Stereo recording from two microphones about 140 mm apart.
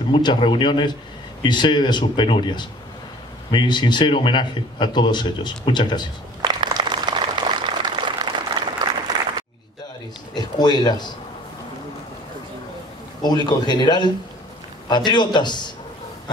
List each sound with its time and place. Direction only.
0.1 s a man's voice: 35° left (ahead or behind)
6.4 s a sound: 35° right (ahead or behind)
10.3 s speech: 30° left (ahead or behind)
13.2 s a man's voice: 30° left (ahead or behind)